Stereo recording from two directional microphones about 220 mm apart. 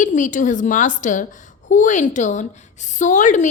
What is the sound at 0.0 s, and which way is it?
A woman's voice, 35° left (ahead or behind).